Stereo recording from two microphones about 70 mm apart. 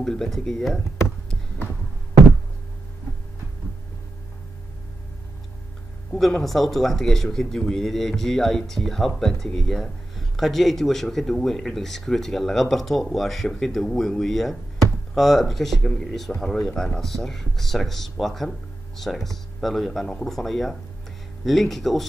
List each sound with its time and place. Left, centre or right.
0.0 s speech: centre
6.1 s speech: centre